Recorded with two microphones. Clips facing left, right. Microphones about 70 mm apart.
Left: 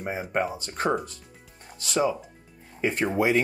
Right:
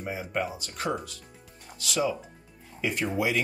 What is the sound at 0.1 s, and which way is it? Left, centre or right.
Speech, left.